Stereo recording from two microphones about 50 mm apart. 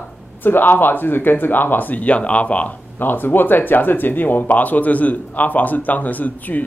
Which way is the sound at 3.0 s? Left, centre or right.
Left.